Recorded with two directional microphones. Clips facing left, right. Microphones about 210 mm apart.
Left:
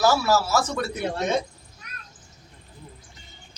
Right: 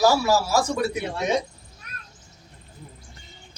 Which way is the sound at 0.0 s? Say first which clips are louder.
Right 1 dB; 15° right (ahead or behind).